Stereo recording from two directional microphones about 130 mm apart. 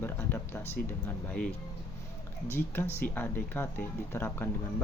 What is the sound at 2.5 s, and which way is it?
A man's voice, 15° left (ahead or behind).